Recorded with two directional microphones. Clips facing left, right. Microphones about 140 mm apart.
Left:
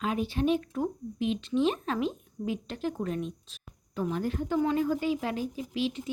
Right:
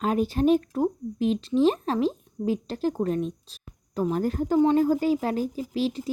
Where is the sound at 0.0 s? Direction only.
40° right (ahead or behind).